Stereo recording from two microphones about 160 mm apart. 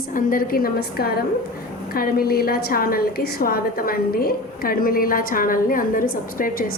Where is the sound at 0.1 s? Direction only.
60° left (ahead or behind).